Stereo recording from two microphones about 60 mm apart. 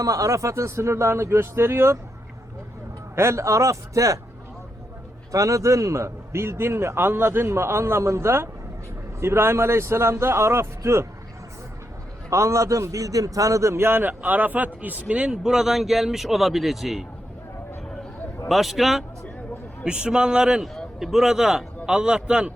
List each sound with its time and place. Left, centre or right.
0.0 s a man's voice: right
3.2 s a man's voice: right
5.3 s a man's voice: right
12.3 s a man's voice: right; by 17.1 s centre
18.4 s a man's voice: centre